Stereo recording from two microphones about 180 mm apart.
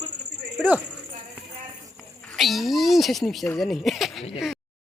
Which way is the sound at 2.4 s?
Centre (ahead or behind).